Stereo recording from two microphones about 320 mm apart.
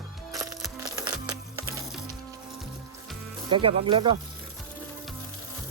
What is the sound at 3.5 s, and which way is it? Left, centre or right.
Speech, centre.